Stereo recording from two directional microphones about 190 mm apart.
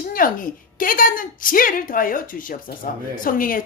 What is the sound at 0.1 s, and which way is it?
A woman's voice, 45° left (ahead or behind).